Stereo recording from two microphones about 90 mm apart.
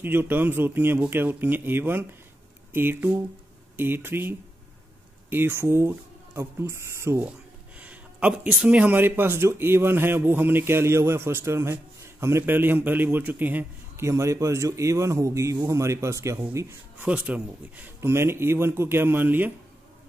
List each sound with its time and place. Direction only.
0.0 s speech: 25° right (ahead or behind)
7.2 s speech: 15° right (ahead or behind)
14.0 s a man's voice: 35° right (ahead or behind)
17.0 s speech: 15° right (ahead or behind)
18.0 s speech: 30° right (ahead or behind)